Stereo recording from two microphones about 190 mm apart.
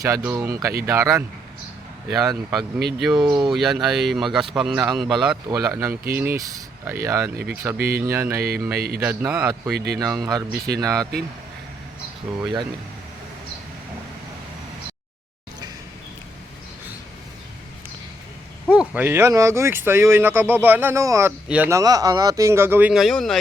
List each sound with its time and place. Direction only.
0.0 s speech: 15° right (ahead or behind)
2.0 s speech: centre (ahead or behind)
3.2 s speech: 20° right (ahead or behind)
3.5 s speech: centre (ahead or behind)
5.5 s speech: 15° right (ahead or behind)
7.8 s speech: 55° right (ahead or behind)
8.0 s speech: 15° right (ahead or behind)
8.4 s speech: 55° right (ahead or behind)
9.0 s speech: 10° right (ahead or behind)
9.7 s speech: 60° right (ahead or behind)
10.1 s speech: 20° right (ahead or behind)
12.3 s speech: 5° right (ahead or behind)
18.7 s speech: 10° right (ahead or behind)